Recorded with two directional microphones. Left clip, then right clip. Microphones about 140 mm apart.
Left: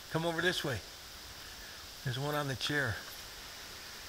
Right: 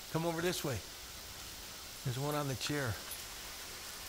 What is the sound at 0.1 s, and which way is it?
Speech, 5° left (ahead or behind).